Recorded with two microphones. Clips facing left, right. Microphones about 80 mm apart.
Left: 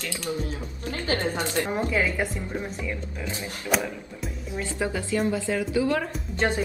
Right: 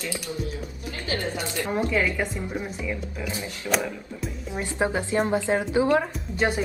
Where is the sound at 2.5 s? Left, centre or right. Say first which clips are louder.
Right 1 dB; centre.